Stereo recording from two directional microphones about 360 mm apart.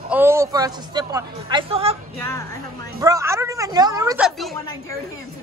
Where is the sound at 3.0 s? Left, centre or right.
Centre.